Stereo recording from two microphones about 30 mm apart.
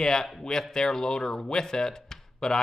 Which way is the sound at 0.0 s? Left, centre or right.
Centre.